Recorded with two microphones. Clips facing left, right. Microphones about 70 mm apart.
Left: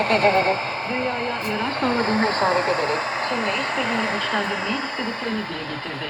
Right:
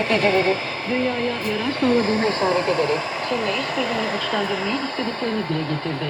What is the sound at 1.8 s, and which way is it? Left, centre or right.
Speech, left.